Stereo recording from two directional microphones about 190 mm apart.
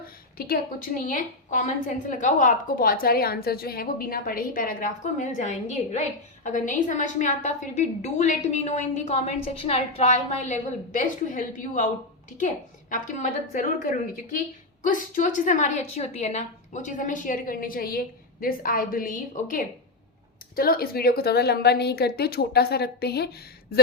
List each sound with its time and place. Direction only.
0.0 s a woman's voice: 50° left (ahead or behind)
12.9 s a woman's voice: 45° left (ahead or behind)